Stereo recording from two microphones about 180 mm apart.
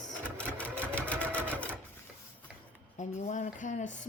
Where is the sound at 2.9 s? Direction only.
40° left (ahead or behind).